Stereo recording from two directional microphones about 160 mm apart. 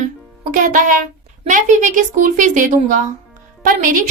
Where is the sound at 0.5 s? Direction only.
55° right (ahead or behind).